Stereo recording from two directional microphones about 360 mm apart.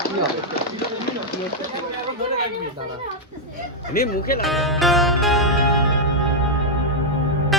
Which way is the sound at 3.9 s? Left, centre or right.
Left.